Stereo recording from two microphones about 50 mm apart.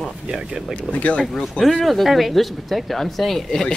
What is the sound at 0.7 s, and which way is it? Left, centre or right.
Speech, left.